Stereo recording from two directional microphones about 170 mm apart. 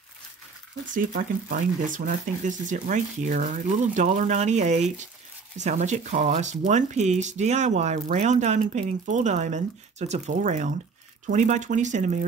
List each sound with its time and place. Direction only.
0.9 s speech: 50° right (ahead or behind)